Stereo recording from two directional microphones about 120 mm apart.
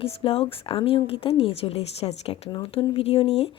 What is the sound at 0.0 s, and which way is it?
A woman's voice, 50° left (ahead or behind).